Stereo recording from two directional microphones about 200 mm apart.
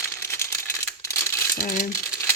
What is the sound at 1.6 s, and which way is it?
Speech, 40° left (ahead or behind).